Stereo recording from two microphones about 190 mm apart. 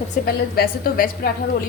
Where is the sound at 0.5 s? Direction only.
50° left (ahead or behind).